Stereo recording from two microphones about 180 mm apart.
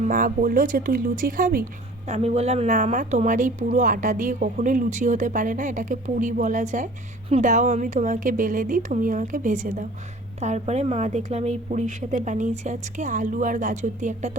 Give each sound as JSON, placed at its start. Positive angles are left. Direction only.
{"t": 0.0, "sound": "speech", "side_deg": -45}
{"t": 2.0, "sound": "a woman's voice", "side_deg": -35}